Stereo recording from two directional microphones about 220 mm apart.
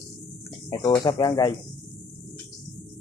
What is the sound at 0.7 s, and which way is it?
Speech, 20° left (ahead or behind).